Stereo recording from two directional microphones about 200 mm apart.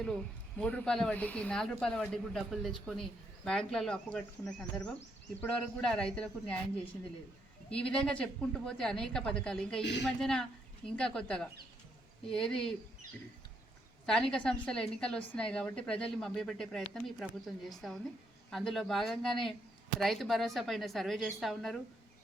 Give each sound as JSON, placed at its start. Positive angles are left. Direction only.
{"t": 0.0, "sound": "speech", "side_deg": 5}
{"t": 7.7, "sound": "speech", "side_deg": 5}
{"t": 14.1, "sound": "speech", "side_deg": 5}